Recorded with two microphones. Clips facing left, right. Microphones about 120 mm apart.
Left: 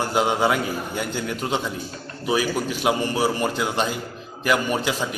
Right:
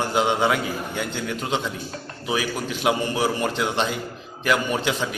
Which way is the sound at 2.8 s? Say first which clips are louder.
Right 1 dB; 15° right (ahead or behind).